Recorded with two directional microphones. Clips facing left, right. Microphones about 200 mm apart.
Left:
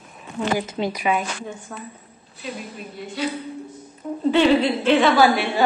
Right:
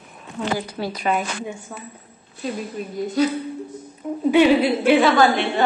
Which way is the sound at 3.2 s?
40° right (ahead or behind).